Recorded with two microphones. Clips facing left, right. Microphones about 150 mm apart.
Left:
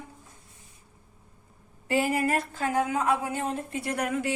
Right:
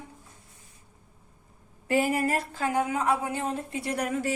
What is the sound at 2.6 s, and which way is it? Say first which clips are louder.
A woman's voice: even; 25° right (ahead or behind).